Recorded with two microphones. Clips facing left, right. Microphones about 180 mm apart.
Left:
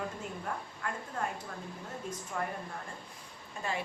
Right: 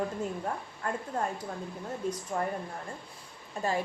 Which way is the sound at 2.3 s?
35° right (ahead or behind).